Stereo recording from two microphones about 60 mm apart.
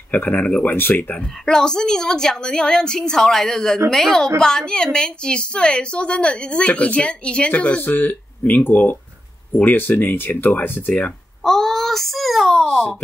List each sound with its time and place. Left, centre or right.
0.1 s speech: left
1.4 s a woman's voice: centre
7.8 s speech: left
11.4 s a child's voice: centre